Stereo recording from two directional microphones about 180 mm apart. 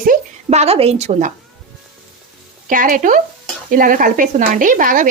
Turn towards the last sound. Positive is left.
turn(degrees=-45)  # may be behind; listen again after turning